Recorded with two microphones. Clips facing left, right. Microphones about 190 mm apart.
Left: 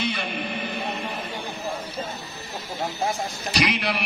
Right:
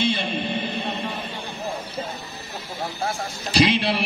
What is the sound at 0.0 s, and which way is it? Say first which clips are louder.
Music: right 4 dB; 25° right (ahead or behind).